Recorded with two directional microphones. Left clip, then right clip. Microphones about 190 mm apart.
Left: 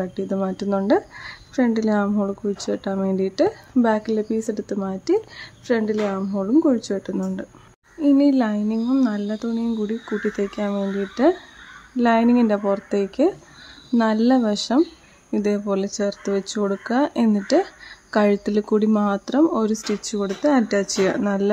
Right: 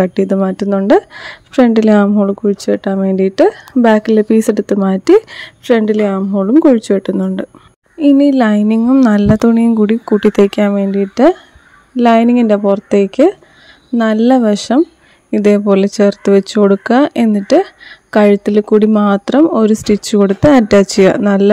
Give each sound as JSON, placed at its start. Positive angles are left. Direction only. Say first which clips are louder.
{"t": 0.0, "sound": "speech", "louder": "right 12 dB", "side_deg": -45}